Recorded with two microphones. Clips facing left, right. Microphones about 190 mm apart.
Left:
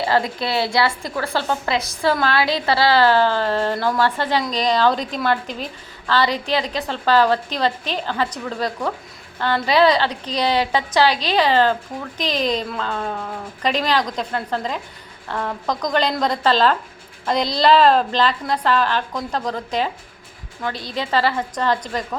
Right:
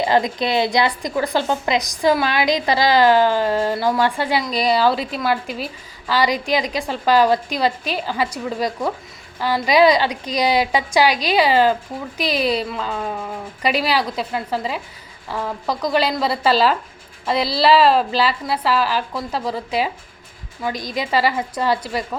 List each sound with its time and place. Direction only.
0.0 s a woman's voice: 20° right (ahead or behind)